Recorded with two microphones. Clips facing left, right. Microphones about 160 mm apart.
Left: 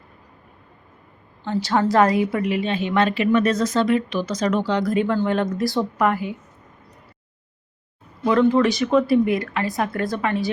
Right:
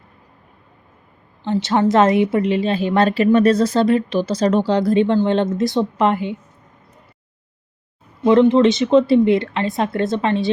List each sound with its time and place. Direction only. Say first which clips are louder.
1.5 s a woman's voice: right 3 dB; 20° right (ahead or behind)
8.2 s a woman's voice: right 5 dB; 20° right (ahead or behind)